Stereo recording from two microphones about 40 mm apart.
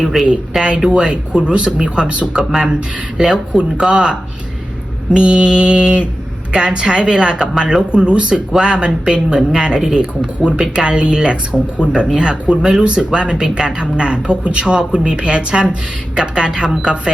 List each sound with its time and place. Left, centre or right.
0.0 s speech: centre
0.8 s speech: right
2.3 s speech: centre